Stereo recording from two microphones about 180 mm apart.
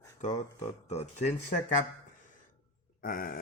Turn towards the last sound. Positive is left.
turn(degrees=50)  # may be behind; listen again after turning